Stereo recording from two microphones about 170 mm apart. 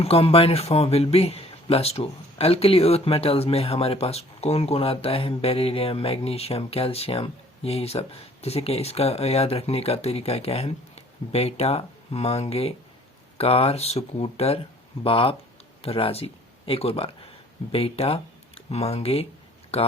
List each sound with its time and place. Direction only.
0.0 s speech: 35° left (ahead or behind)